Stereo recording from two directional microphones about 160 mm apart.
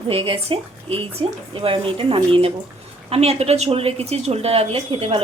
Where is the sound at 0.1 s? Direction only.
35° right (ahead or behind).